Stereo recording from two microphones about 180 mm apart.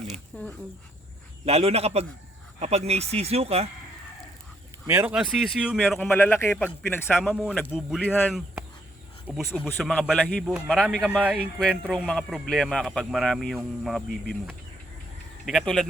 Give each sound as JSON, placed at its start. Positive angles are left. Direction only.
{"t": 0.3, "sound": "speech", "side_deg": 10}
{"t": 1.5, "sound": "speech", "side_deg": -35}
{"t": 4.9, "sound": "a man's voice", "side_deg": -10}
{"t": 6.1, "sound": "speech", "side_deg": 10}
{"t": 7.2, "sound": "a man's voice", "side_deg": -5}
{"t": 9.5, "sound": "speech", "side_deg": 10}
{"t": 9.8, "sound": "a man's voice", "side_deg": 0}